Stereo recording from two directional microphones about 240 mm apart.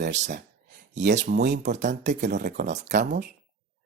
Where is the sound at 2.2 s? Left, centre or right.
Right.